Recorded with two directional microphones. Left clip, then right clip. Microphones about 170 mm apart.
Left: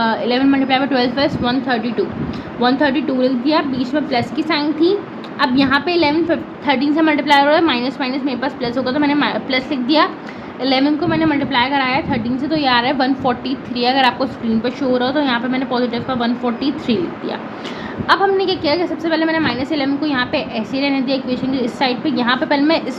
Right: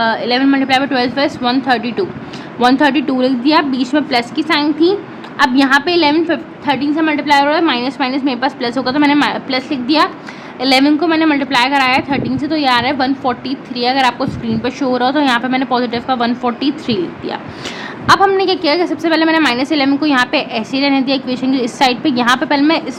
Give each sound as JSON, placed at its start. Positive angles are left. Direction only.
{"t": 0.0, "sound": "a woman's voice", "side_deg": -15}
{"t": 6.7, "sound": "a woman's voice", "side_deg": -10}
{"t": 14.6, "sound": "a woman's voice", "side_deg": -30}